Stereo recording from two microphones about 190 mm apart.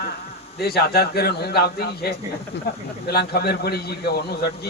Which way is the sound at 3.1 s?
55° left (ahead or behind).